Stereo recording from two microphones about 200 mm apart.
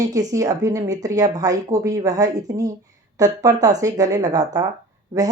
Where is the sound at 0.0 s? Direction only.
15° right (ahead or behind).